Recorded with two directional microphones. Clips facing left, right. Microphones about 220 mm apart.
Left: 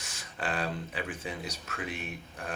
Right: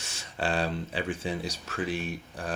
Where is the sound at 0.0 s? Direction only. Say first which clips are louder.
Right 4 dB; 30° right (ahead or behind).